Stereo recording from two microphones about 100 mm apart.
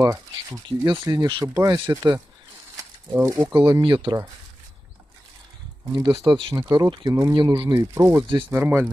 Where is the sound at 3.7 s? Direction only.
55° right (ahead or behind).